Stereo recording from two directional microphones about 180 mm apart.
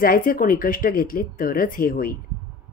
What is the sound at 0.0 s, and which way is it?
A woman's voice, 50° left (ahead or behind).